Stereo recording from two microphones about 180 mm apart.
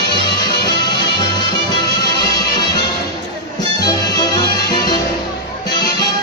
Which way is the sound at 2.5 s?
20° left (ahead or behind).